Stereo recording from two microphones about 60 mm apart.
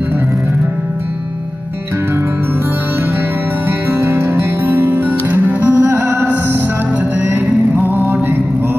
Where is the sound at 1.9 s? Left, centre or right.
Right.